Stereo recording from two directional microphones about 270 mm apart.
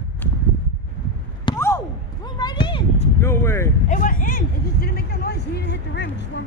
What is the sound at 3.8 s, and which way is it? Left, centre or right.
Vehicle, left.